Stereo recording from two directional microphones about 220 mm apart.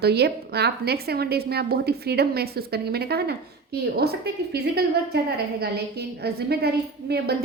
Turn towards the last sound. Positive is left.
turn(degrees=-45)  # may be behind; listen again after turning